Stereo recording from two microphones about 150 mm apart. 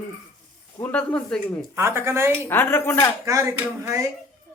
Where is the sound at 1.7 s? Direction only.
15° right (ahead or behind).